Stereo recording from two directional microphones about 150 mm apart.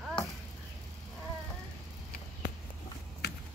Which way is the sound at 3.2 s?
90° left.